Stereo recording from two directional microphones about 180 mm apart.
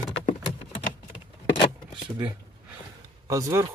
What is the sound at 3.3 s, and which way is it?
Speech, 15° right (ahead or behind).